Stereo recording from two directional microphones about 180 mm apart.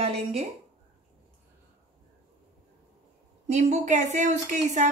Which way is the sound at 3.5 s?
40° right (ahead or behind).